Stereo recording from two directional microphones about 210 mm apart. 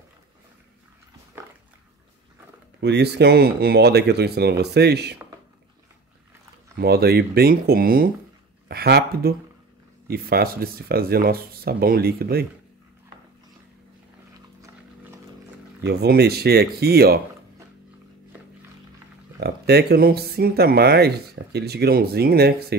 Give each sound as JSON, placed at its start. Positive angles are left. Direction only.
{"t": 2.8, "sound": "speech", "side_deg": -55}
{"t": 6.8, "sound": "speech", "side_deg": -50}
{"t": 15.8, "sound": "speech", "side_deg": -50}
{"t": 19.4, "sound": "speech", "side_deg": -50}